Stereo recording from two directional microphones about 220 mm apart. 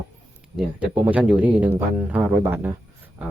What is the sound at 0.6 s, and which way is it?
Speech, 5° right (ahead or behind).